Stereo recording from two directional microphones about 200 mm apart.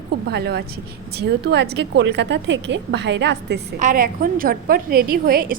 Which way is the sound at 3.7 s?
40° right (ahead or behind).